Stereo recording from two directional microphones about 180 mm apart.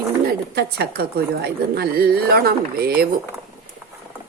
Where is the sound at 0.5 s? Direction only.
60° right (ahead or behind).